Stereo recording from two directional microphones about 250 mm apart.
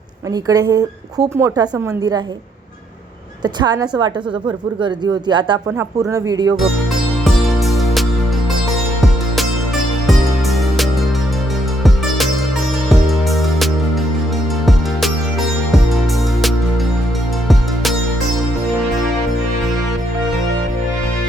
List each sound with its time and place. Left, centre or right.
0.4 s a woman's voice: centre
3.4 s a woman's voice: centre
7.6 s music: centre
11.8 s music: centre